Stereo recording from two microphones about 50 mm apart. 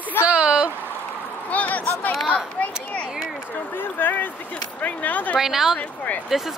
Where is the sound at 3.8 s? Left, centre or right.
Left.